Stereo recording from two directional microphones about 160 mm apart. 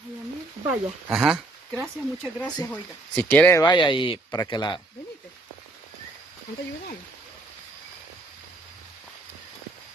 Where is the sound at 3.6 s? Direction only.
30° left (ahead or behind).